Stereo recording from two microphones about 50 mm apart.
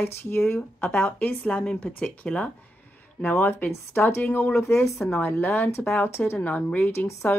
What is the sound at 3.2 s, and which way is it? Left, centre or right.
Speech, left.